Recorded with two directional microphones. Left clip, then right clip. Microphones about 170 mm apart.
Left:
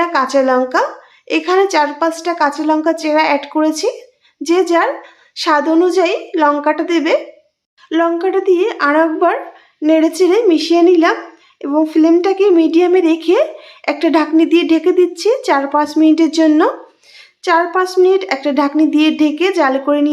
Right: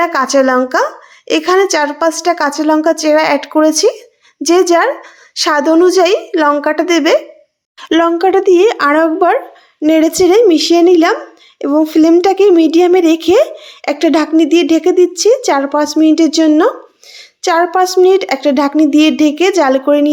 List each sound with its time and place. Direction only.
0.0 s a woman's voice: 30° right (ahead or behind)
7.8 s a woman's voice: 50° right (ahead or behind); by 16.7 s 20° right (ahead or behind)
17.4 s speech: 30° right (ahead or behind)